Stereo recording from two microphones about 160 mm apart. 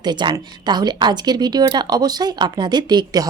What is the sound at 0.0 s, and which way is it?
Speech, 25° right (ahead or behind).